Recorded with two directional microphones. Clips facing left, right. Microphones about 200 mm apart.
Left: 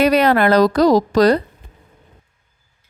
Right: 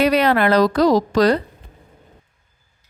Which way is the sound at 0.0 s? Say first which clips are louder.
Left 2 dB; 45° left (ahead or behind).